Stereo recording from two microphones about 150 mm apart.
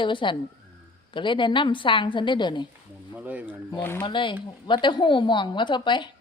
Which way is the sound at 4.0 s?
30° left (ahead or behind).